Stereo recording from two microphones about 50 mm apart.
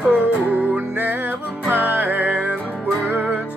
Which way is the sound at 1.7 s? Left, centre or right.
Right.